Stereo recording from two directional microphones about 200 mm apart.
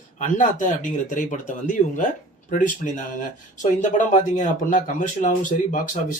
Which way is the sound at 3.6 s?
40° left (ahead or behind).